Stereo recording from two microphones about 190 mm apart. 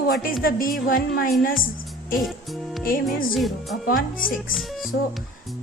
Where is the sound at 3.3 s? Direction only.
Centre (ahead or behind).